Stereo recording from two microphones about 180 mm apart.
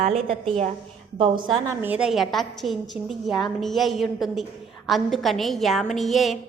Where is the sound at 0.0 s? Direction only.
40° right (ahead or behind).